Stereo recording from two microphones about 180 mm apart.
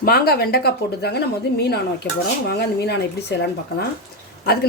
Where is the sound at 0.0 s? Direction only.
60° left (ahead or behind).